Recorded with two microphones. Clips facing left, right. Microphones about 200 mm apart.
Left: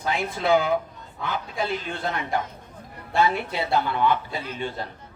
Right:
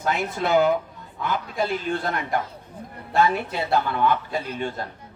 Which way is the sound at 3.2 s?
45° right (ahead or behind).